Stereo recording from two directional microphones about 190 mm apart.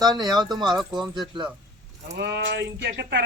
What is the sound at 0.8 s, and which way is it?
Speech, centre (ahead or behind).